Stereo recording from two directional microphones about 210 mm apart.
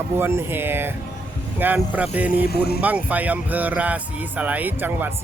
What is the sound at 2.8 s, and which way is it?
Speech, 5° right (ahead or behind).